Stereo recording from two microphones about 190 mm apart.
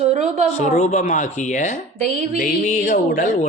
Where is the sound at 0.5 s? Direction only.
35° left (ahead or behind).